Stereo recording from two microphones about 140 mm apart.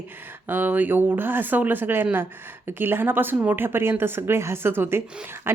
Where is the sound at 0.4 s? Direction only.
15° right (ahead or behind).